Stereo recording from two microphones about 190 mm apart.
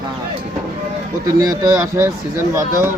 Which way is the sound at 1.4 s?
20° right (ahead or behind).